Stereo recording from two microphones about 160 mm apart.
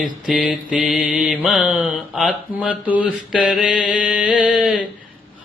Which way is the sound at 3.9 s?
5° right (ahead or behind).